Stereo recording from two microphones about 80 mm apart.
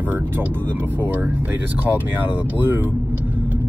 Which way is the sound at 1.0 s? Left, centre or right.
Right.